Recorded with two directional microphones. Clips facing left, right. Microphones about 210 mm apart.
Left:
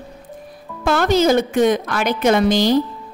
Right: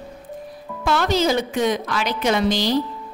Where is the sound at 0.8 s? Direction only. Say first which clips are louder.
Left 4 dB; 50° left (ahead or behind).